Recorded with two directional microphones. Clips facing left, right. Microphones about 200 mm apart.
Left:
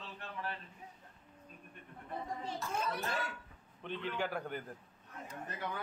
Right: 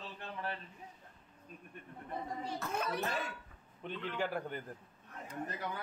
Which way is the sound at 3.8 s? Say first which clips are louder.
Even; 5° right (ahead or behind).